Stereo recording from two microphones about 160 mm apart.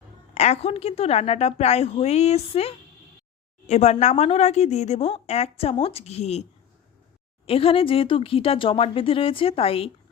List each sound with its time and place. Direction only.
0.3 s speech: 45° left (ahead or behind)